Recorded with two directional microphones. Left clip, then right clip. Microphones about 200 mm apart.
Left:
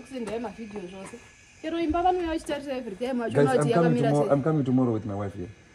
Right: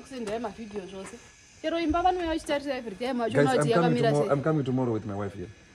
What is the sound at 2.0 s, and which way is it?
Speech, 40° right (ahead or behind).